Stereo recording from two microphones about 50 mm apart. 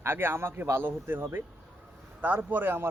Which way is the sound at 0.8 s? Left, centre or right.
Right.